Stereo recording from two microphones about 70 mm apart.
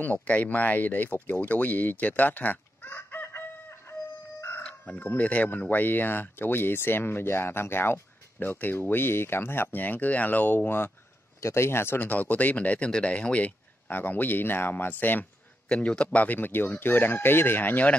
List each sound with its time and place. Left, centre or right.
0.0 s speech: left
4.4 s chicken: left
4.6 s speech: centre
15.7 s speech: centre